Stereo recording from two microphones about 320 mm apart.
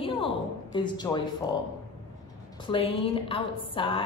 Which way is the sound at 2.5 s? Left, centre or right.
Centre.